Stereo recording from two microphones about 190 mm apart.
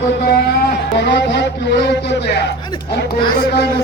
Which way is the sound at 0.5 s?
60° left (ahead or behind).